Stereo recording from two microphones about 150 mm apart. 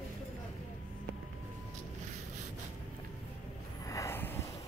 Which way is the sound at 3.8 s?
20° left (ahead or behind).